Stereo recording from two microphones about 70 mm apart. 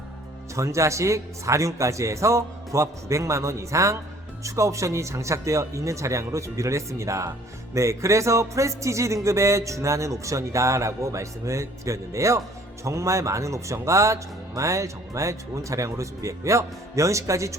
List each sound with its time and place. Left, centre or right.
0.5 s music: right